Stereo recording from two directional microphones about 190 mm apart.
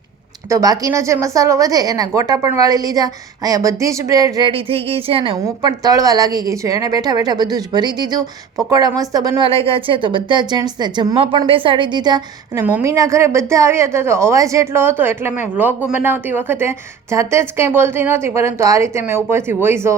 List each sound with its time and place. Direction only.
0.4 s a woman's voice: 15° right (ahead or behind)